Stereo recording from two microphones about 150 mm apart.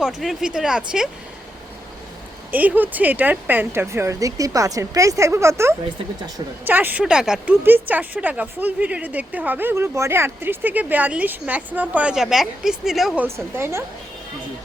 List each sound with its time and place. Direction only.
0.0 s speech: centre (ahead or behind)
2.5 s speech: 10° right (ahead or behind)
13.2 s speech: 15° right (ahead or behind)